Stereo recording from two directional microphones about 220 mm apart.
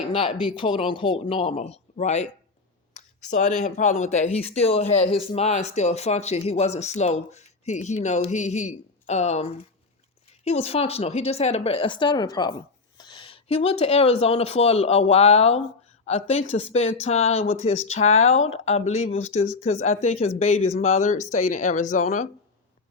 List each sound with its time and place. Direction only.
0.0 s speech: 25° left (ahead or behind)
18.1 s speech: 70° left (ahead or behind)
18.4 s speech: 30° left (ahead or behind)